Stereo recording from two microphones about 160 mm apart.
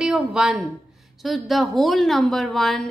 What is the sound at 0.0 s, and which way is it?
A woman's voice, 5° right (ahead or behind).